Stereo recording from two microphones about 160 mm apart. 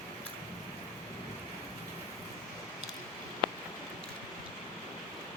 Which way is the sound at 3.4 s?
30° right (ahead or behind).